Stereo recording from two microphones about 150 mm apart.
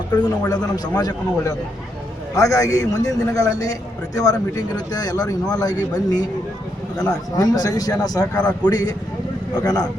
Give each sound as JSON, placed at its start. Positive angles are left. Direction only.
{"t": 0.1, "sound": "a man's voice", "side_deg": 25}
{"t": 7.3, "sound": "a man's voice", "side_deg": 25}
{"t": 8.4, "sound": "a man's voice", "side_deg": 5}
{"t": 8.7, "sound": "a man's voice", "side_deg": 25}